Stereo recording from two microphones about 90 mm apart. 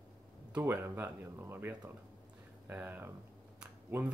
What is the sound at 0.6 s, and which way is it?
Speech, 25° right (ahead or behind).